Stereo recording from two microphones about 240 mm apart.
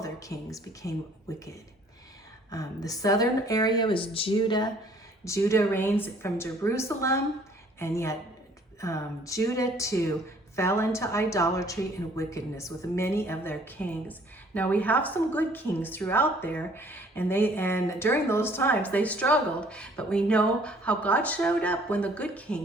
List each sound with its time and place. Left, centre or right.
0.0 s a woman's voice: centre
2.5 s a woman's voice: centre